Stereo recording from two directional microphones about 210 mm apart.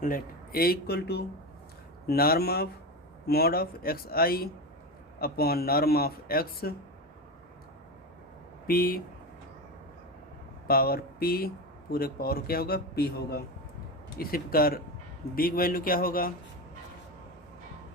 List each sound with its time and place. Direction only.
0.0 s speech: 45° left (ahead or behind)
8.6 s speech: 45° left (ahead or behind)
10.7 s speech: 45° left (ahead or behind)